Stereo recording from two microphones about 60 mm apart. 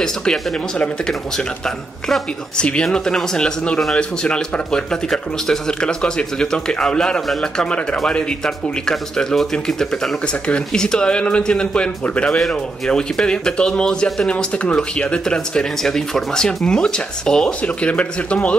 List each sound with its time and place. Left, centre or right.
0.0 s speech: centre
2.5 s speech: centre
8.8 s speech: centre
14.3 s speech: left